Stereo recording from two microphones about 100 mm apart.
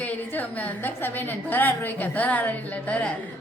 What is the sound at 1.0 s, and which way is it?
A woman's voice, 20° left (ahead or behind).